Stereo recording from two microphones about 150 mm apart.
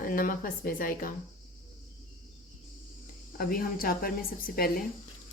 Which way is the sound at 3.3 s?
75° left (ahead or behind).